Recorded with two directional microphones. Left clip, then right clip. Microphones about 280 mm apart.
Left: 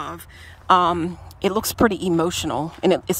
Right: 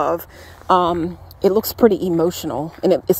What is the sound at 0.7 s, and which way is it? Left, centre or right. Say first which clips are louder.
Speech: right 1 dB; left.